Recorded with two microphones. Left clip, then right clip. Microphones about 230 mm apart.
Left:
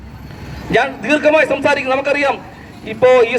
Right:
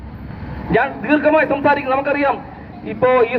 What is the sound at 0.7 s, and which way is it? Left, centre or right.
A man's voice, left.